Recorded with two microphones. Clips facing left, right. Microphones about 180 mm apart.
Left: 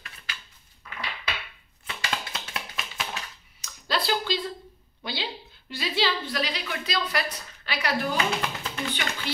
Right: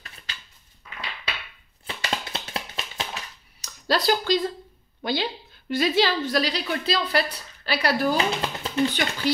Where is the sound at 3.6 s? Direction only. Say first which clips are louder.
Right 5 dB; 40° right (ahead or behind).